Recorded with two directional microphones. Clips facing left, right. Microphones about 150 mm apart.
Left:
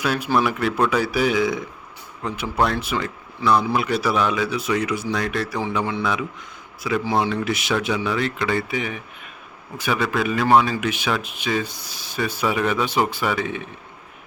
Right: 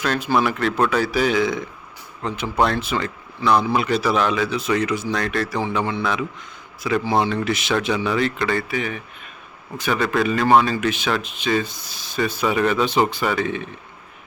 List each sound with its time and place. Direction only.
0.0 s speech: 10° left (ahead or behind)
8.5 s speech: 15° left (ahead or behind)